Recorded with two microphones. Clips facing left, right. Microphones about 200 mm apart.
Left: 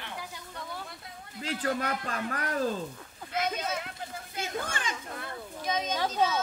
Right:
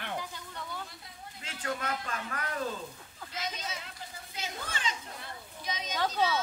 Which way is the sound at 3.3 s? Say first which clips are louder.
Left 8 dB; 55° left (ahead or behind).